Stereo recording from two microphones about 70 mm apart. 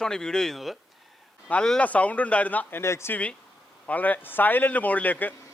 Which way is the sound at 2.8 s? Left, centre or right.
Left.